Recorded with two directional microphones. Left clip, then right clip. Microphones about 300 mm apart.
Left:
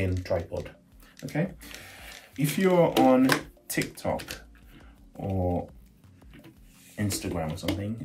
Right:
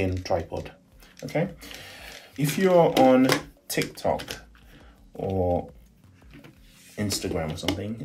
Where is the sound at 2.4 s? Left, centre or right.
Centre.